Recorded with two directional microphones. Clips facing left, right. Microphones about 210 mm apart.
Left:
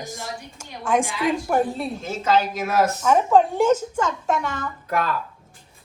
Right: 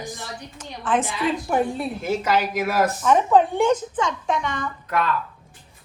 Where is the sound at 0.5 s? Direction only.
10° left (ahead or behind).